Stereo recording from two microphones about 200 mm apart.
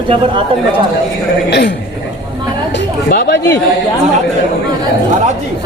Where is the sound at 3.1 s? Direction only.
50° left (ahead or behind).